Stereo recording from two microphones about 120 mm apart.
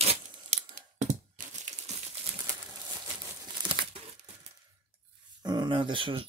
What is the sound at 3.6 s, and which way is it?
Crumpling, 40° right (ahead or behind).